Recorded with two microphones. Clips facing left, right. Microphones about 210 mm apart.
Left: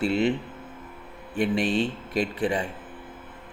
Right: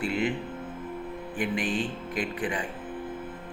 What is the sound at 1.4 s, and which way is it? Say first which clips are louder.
A man's voice: left 5 dB; 25° left (ahead or behind).